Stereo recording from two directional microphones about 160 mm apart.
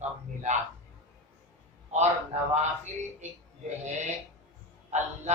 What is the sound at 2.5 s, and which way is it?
Speech, 45° right (ahead or behind).